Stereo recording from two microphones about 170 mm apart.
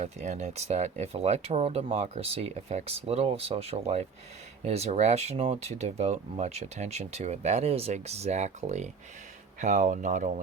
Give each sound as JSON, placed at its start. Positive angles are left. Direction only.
{"t": 0.0, "sound": "speech", "side_deg": -40}